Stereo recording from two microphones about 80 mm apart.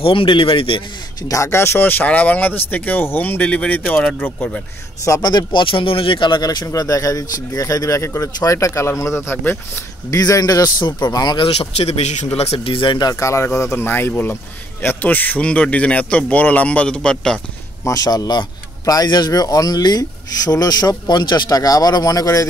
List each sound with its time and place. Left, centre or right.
0.1 s speech: left
1.3 s speech: left
5.2 s speech: left
10.1 s speech: left
11.1 s speech: left
12.5 s speech: left
13.1 s a man's voice: left; by 17.4 s centre
17.8 s a man's voice: left